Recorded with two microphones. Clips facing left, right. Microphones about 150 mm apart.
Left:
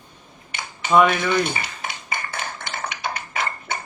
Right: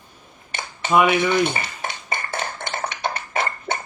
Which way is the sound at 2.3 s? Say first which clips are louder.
Right 3 dB; 55° right (ahead or behind).